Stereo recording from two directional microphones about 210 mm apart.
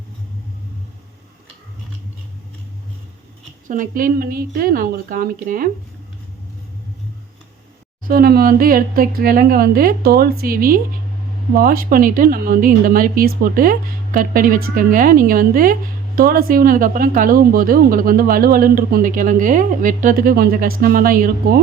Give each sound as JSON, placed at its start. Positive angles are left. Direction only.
{"t": 3.7, "sound": "speech", "side_deg": -40}
{"t": 8.0, "sound": "speech", "side_deg": -45}